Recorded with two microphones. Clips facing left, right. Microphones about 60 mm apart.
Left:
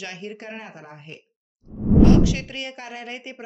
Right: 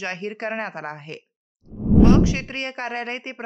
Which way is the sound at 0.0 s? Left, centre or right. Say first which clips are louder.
Right 6 dB; right.